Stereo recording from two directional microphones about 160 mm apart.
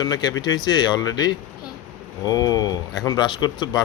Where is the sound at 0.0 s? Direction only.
25° left (ahead or behind).